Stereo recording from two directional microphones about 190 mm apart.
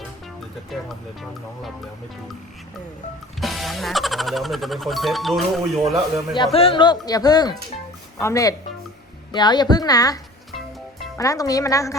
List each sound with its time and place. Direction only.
0.7 s speech: centre (ahead or behind)
3.4 s speech: centre (ahead or behind)
6.3 s a woman's voice: 25° left (ahead or behind)
11.2 s a woman's voice: 20° left (ahead or behind)